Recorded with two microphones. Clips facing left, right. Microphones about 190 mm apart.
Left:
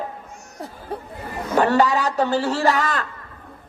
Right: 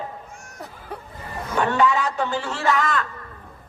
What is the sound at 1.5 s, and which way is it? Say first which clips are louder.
A man's voice: left 3 dB; 35° left (ahead or behind).